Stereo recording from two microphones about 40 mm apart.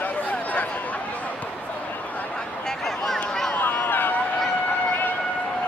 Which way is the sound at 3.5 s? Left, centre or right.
Left.